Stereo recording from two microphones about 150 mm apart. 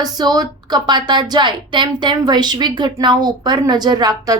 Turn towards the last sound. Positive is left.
turn(degrees=-25)  # may be behind; listen again after turning